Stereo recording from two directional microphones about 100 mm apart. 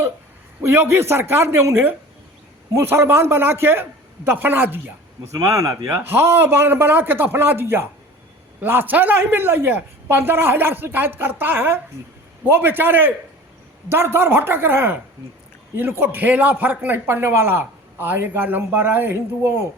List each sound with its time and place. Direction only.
0.6 s a man's voice: 25° right (ahead or behind)
5.4 s a man's voice: 30° right (ahead or behind)